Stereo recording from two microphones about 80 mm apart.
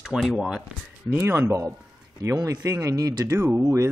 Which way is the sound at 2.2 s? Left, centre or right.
Right.